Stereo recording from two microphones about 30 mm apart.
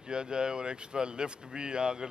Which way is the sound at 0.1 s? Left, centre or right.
Right.